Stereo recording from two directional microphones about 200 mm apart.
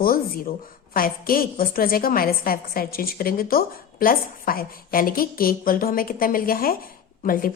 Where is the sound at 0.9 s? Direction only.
45° left (ahead or behind).